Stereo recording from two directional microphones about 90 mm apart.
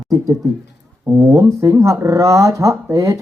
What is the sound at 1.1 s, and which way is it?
Speech, 35° right (ahead or behind).